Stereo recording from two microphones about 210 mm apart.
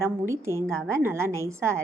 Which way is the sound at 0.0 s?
15° right (ahead or behind).